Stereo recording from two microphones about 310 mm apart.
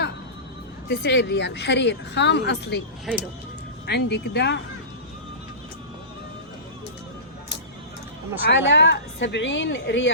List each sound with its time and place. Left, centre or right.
0.9 s speech: left
3.1 s speech: centre
3.8 s speech: left
8.4 s speech: left